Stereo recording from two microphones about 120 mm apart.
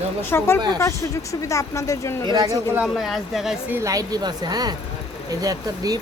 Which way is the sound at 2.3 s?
35° right (ahead or behind).